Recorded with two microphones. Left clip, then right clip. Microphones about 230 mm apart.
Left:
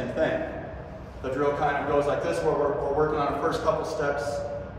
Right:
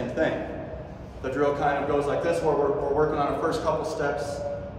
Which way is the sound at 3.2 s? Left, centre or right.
Centre.